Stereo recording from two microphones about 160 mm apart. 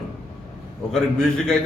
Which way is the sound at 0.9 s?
5° left (ahead or behind).